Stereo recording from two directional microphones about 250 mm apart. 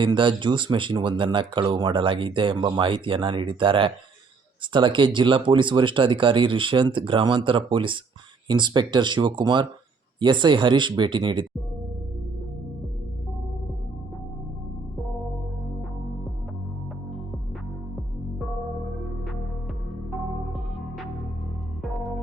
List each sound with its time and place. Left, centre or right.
0.0 s speech: centre
20.1 s music: centre